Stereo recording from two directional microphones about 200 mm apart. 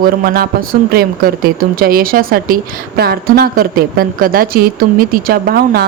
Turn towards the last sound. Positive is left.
turn(degrees=-50)  # may be behind; listen again after turning